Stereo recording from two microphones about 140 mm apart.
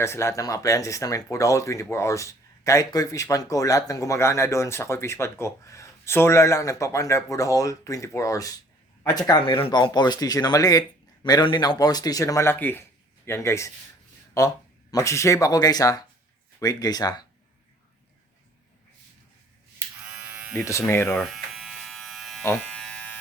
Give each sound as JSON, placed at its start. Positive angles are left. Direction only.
{"t": 0.0, "sound": "speech", "side_deg": 20}
{"t": 9.4, "sound": "speech", "side_deg": 40}
{"t": 20.1, "sound": "electric shaver", "side_deg": -10}
{"t": 20.7, "sound": "speech", "side_deg": 20}
{"t": 21.2, "sound": "electric shaver", "side_deg": 0}